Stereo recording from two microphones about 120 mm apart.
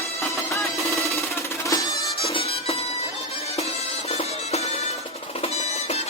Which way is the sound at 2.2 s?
55° left (ahead or behind).